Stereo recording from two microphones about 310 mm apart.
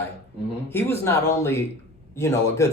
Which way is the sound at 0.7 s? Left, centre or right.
Centre.